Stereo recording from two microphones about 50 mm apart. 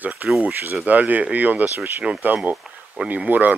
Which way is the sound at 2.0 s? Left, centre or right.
Centre.